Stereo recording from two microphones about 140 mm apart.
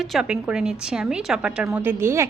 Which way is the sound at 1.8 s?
15° right (ahead or behind).